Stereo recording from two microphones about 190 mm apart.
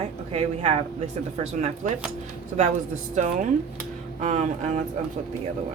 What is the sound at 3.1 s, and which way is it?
A woman's voice, 40° right (ahead or behind).